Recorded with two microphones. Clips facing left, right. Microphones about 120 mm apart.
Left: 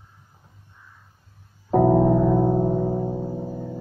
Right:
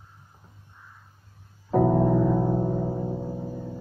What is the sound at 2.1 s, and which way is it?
Music, 25° left (ahead or behind).